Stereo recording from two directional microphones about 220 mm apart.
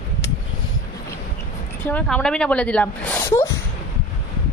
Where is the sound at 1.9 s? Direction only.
5° left (ahead or behind).